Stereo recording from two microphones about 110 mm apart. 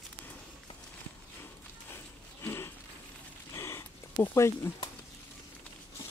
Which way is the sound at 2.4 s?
25° left (ahead or behind).